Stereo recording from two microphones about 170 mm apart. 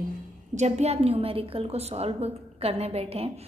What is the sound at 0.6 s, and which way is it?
A woman's voice, 40° right (ahead or behind).